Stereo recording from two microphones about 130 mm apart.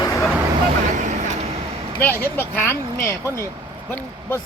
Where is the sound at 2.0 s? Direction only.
15° left (ahead or behind).